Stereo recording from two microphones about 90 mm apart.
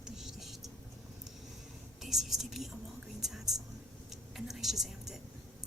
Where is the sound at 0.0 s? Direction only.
5° right (ahead or behind).